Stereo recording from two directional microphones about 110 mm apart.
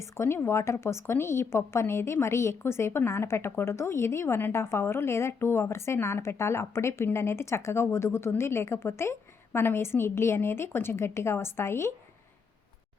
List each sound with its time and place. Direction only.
0.0 s a woman's voice: 25° left (ahead or behind)